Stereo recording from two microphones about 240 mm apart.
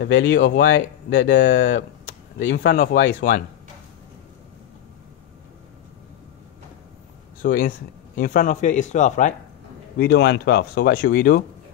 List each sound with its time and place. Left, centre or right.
0.0 s speech: left
0.4 s speech: left
0.7 s speech: left
8.2 s speech: left
9.9 s speech: left